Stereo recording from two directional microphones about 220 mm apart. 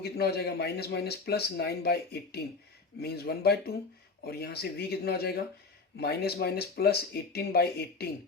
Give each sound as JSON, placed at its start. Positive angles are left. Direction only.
{"t": 0.0, "sound": "speech", "side_deg": 45}